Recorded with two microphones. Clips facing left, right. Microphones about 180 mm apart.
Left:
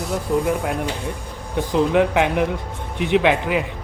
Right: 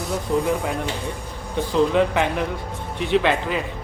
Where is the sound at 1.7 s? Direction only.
15° left (ahead or behind).